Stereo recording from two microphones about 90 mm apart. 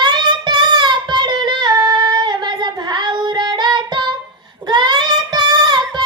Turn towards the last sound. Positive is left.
turn(degrees=-50)  # may be behind; listen again after turning